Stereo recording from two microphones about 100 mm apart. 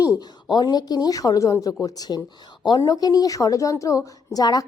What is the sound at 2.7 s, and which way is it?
A woman's voice, 35° left (ahead or behind).